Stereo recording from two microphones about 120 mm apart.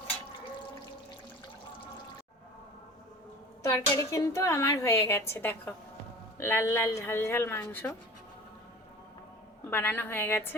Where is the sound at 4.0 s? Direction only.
25° left (ahead or behind).